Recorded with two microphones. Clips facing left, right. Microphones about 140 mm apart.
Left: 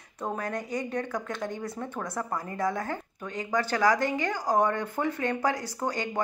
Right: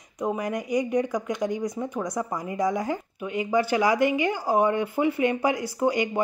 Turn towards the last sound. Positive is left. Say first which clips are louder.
# right 7 dB
turn(degrees=-15)  # may be behind; listen again after turning